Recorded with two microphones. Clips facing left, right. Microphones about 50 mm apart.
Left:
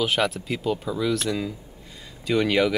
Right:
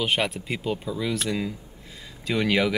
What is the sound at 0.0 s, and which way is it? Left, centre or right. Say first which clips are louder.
Speech: left 2 dB; centre.